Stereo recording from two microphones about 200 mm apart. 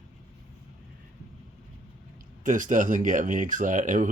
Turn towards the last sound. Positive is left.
turn(degrees=-40)  # may be behind; listen again after turning